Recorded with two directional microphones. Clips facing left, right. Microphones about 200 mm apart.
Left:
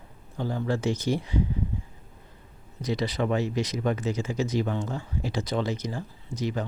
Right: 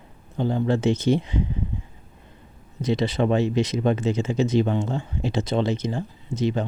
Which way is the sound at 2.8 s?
25° right (ahead or behind).